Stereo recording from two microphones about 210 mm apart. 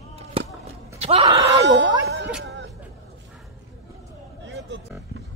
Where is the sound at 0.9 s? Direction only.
30° right (ahead or behind).